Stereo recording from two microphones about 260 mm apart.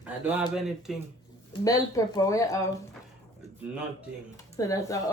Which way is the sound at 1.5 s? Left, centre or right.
Centre.